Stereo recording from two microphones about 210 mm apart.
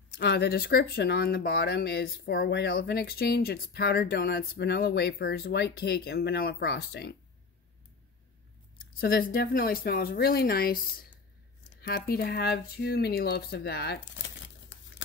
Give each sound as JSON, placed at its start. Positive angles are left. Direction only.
{"t": 0.2, "sound": "speech", "side_deg": 50}
{"t": 9.0, "sound": "speech", "side_deg": 45}
{"t": 11.8, "sound": "speech", "side_deg": 50}